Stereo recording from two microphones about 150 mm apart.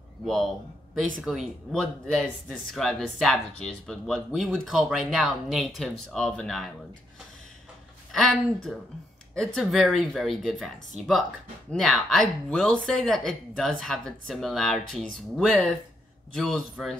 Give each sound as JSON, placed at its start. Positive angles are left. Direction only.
{"t": 0.2, "sound": "a man's voice", "side_deg": 0}
{"t": 8.1, "sound": "speech", "side_deg": 0}
{"t": 11.7, "sound": "speech", "side_deg": 5}